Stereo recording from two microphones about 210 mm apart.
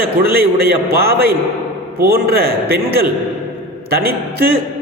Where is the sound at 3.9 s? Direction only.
45° right (ahead or behind).